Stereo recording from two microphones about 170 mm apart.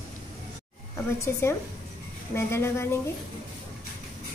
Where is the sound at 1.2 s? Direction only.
15° left (ahead or behind).